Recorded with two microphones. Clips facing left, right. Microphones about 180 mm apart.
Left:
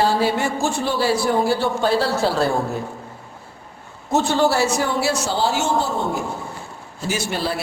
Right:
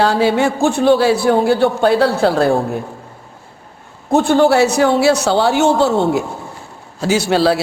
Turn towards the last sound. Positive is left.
turn(degrees=-90)